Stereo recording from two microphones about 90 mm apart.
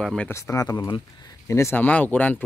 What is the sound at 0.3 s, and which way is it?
Speech, 35° left (ahead or behind).